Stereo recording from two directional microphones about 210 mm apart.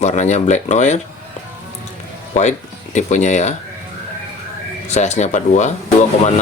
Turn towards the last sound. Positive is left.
turn(degrees=35)  # may be behind; listen again after turning